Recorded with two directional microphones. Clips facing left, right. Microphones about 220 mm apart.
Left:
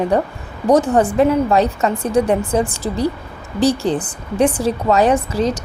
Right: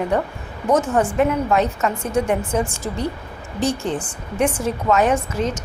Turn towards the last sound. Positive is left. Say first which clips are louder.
# left 4 dB
turn(degrees=35)  # may be behind; listen again after turning